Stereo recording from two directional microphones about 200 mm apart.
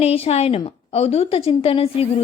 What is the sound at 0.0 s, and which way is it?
A woman's voice, 30° left (ahead or behind).